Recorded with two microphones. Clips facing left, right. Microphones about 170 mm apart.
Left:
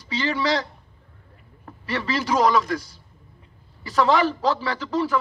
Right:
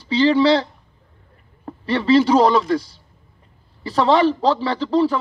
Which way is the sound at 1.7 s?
30° right (ahead or behind).